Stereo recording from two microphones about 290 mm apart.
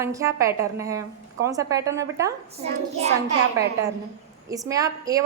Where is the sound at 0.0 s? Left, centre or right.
Centre.